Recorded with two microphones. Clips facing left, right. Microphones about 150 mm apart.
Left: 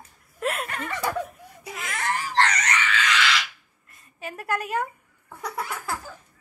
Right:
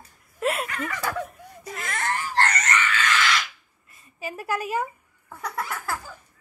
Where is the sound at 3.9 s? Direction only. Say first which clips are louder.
Right 2 dB; 5° right (ahead or behind).